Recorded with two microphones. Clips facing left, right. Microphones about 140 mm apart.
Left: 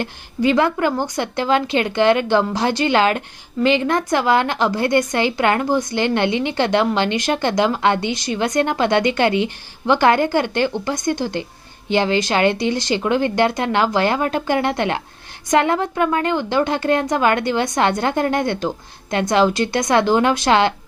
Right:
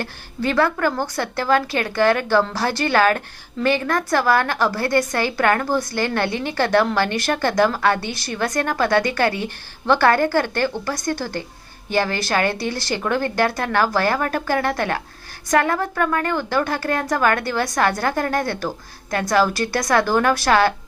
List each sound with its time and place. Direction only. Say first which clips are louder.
0.0 s a woman's voice: left 5 dB; 20° left (ahead or behind)